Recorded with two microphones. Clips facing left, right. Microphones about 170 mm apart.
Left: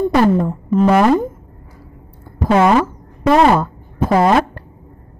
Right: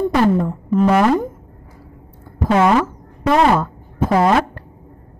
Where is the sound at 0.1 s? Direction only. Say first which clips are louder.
Left 2 dB; 30° left (ahead or behind).